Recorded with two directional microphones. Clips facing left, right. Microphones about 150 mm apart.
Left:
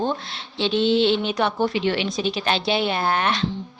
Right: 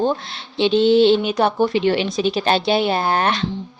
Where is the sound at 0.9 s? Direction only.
45° right (ahead or behind).